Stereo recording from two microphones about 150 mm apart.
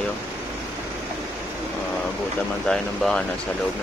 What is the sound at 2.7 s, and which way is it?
Speech, 5° left (ahead or behind).